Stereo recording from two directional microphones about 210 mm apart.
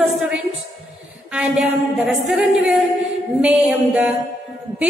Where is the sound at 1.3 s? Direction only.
5° right (ahead or behind).